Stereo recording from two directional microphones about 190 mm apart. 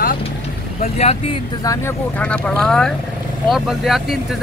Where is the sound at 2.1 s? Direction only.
5° left (ahead or behind).